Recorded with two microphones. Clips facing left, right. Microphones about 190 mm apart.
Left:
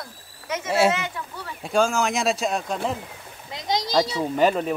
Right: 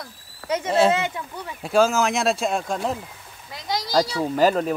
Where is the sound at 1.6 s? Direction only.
Centre (ahead or behind).